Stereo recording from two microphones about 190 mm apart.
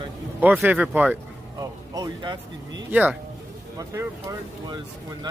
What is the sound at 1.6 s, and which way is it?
Speech, 20° right (ahead or behind).